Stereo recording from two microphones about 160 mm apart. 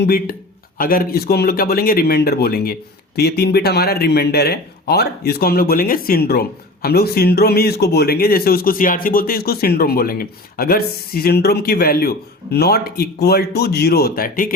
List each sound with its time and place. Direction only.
0.0 s speech: 70° left (ahead or behind)